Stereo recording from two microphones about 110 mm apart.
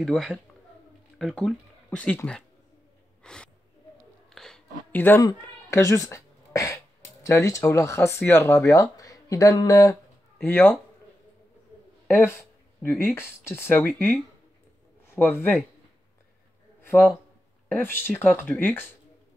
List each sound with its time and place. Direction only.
0.0 s a man's voice: 5° left (ahead or behind)
3.2 s gasp: 10° left (ahead or behind)
4.3 s a sound: 5° left (ahead or behind)
4.9 s speech: 20° left (ahead or behind)
10.4 s speech: 20° left (ahead or behind)
12.1 s a sound: 15° left (ahead or behind)
13.0 s speech: 20° left (ahead or behind)
16.8 s a sound: 20° left (ahead or behind)
17.6 s speech: 20° left (ahead or behind)